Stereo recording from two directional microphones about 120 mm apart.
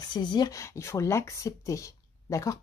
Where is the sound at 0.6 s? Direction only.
25° left (ahead or behind).